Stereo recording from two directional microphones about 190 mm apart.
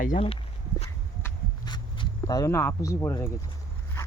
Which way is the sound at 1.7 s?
25° left (ahead or behind).